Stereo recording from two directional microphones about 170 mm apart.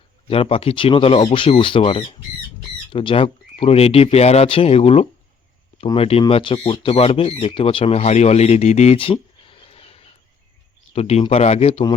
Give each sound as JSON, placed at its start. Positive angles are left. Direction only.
{"t": 0.3, "sound": "speech", "side_deg": 35}